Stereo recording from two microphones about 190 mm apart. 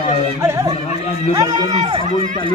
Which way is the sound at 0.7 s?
35° left (ahead or behind).